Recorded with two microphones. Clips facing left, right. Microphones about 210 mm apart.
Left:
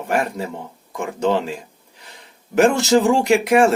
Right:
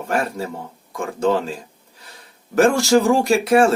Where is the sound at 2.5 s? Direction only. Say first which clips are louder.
Even; 20° left (ahead or behind).